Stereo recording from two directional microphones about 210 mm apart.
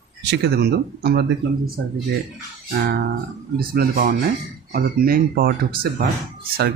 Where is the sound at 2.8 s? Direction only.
50° right (ahead or behind).